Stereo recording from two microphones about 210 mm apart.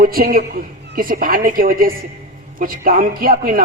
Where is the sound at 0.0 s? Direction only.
45° right (ahead or behind).